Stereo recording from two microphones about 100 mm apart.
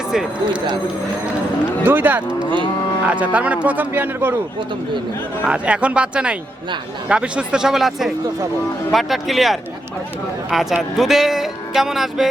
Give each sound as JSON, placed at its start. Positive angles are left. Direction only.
{"t": 0.1, "sound": "speech", "side_deg": -5}
{"t": 1.8, "sound": "speech", "side_deg": -20}
{"t": 5.5, "sound": "speech", "side_deg": -10}